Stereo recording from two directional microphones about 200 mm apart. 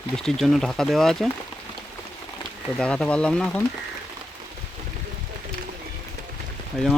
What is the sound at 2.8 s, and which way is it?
Speech, 5° left (ahead or behind).